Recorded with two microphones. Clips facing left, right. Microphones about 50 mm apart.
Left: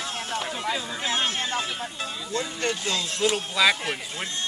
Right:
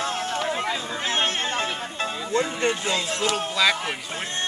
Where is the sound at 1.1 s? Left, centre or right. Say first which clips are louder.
Right 2 dB; right.